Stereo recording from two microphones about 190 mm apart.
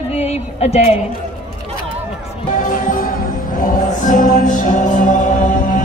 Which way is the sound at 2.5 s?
45° left (ahead or behind).